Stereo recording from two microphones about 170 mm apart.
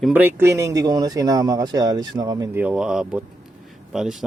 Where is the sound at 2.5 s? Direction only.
5° right (ahead or behind).